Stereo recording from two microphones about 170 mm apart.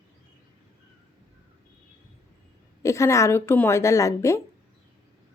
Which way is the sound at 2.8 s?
15° left (ahead or behind).